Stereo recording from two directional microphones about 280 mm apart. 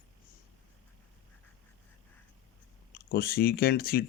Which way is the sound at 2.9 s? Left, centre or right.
Left.